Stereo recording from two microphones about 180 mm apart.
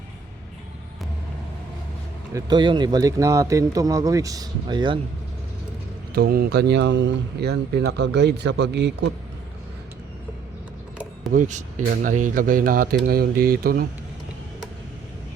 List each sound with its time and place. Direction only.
2.3 s a man's voice: 25° right (ahead or behind)
6.1 s speech: 60° right (ahead or behind)
11.3 s speech: 45° right (ahead or behind)